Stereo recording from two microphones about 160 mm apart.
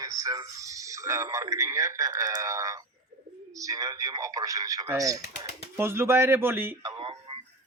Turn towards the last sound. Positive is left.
turn(degrees=-35)  # may be behind; listen again after turning